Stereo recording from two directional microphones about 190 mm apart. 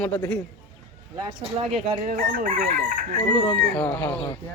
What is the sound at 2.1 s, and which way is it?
Chicken, 45° right (ahead or behind).